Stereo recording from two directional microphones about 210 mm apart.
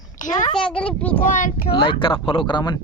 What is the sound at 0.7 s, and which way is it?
Speech, 5° left (ahead or behind).